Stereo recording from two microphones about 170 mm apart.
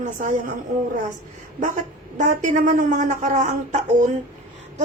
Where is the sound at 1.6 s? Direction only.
45° right (ahead or behind).